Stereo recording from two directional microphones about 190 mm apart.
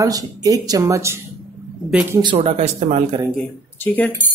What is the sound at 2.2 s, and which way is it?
Speech, 30° right (ahead or behind).